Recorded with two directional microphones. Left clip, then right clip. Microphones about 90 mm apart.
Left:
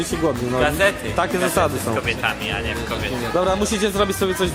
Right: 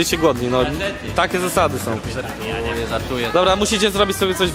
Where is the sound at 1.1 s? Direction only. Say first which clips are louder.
Right 1 dB; centre (ahead or behind).